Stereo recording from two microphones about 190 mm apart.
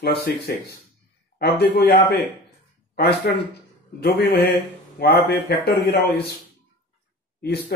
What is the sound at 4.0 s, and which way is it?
Speech, 55° left (ahead or behind).